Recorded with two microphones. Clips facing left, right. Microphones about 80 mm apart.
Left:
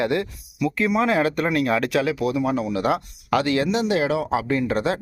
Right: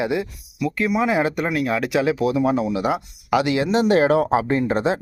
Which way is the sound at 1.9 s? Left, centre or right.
Right.